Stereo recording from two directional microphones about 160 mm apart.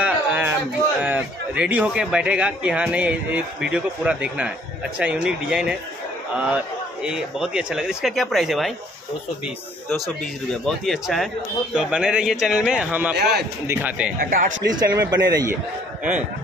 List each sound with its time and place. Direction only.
0.0 s a sound: 10° right (ahead or behind)
1.0 s a man's voice: 10° right (ahead or behind)
9.8 s a man's voice: centre (ahead or behind)
13.1 s a man's voice: 90° right
13.7 s a man's voice: 10° right (ahead or behind)
14.2 s speech: 65° right (ahead or behind)
14.7 s speech: 25° right (ahead or behind)
16.0 s a man's voice: 10° right (ahead or behind)